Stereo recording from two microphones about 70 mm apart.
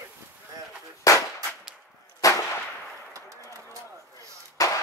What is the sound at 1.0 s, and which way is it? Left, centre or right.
Firecracker, left.